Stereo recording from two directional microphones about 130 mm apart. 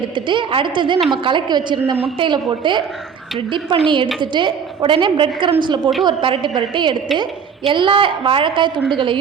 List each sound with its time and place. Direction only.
0.3 s a woman's voice: 40° right (ahead or behind)